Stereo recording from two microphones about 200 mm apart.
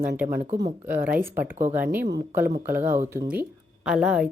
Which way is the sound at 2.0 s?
55° right (ahead or behind).